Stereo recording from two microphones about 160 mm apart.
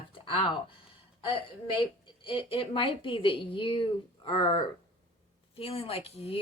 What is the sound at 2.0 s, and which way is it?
Speech, 35° left (ahead or behind).